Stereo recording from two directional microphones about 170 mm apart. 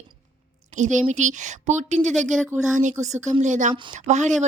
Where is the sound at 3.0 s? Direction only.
45° right (ahead or behind).